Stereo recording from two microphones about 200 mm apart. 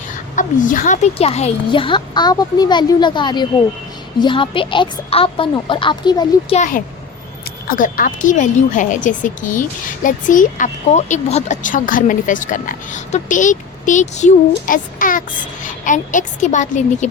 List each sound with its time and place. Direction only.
0.3 s a woman's voice: 40° left (ahead or behind); by 6.6 s 20° left (ahead or behind)
6.6 s a child's voice: 45° left (ahead or behind)